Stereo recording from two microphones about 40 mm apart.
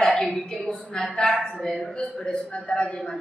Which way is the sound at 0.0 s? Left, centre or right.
Centre.